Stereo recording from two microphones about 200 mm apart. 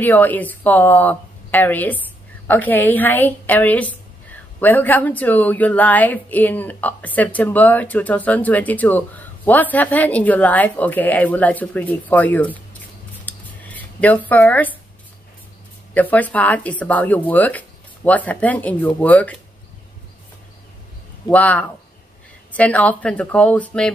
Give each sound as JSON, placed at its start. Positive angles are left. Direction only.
{"t": 0.0, "sound": "a woman's voice", "side_deg": 10}
{"t": 13.2, "sound": "a sound", "side_deg": 10}
{"t": 15.9, "sound": "a woman's voice", "side_deg": 10}
{"t": 21.3, "sound": "a woman's voice", "side_deg": 5}